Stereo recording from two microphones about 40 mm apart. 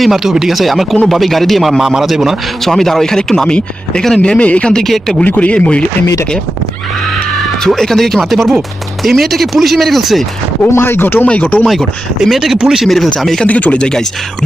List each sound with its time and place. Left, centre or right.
0.0 s speech: centre
1.8 s speech: centre
2.6 s speech: centre
4.2 s speech: left
5.2 s speech: left
5.5 s speech: left
7.8 s speech: centre
10.7 s speech: left
11.3 s speech: left
12.2 s speech: centre
12.8 s speech: centre
13.5 s speech: left
13.7 s speech: left